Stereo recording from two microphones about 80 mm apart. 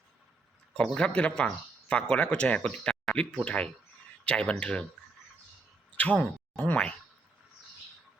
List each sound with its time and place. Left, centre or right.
0.8 s speech: centre
6.0 s speech: centre